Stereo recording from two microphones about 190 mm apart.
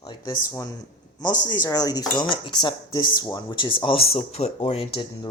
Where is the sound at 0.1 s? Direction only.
15° left (ahead or behind).